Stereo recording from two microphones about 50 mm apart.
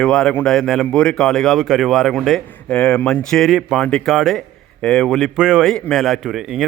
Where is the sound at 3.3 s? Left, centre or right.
Centre.